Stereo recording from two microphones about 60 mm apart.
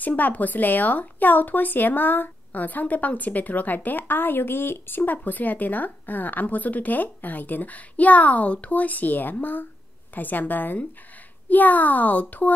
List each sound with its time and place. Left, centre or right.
0.0 s a woman's voice: left